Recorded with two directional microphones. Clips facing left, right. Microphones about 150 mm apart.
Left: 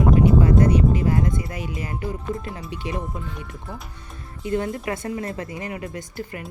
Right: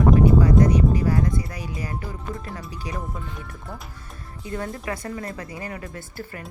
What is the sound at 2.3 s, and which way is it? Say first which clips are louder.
Speech: left 4 dB; 25° left (ahead or behind).